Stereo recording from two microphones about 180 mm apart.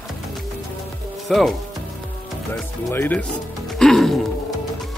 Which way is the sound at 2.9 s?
10° left (ahead or behind).